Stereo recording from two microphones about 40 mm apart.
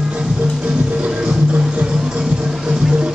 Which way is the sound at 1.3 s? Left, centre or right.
Right.